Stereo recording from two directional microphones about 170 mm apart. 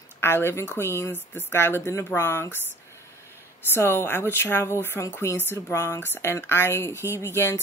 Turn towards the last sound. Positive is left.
turn(degrees=15)  # may be behind; listen again after turning